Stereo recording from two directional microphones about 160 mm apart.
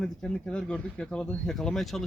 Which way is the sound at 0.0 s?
5° left (ahead or behind).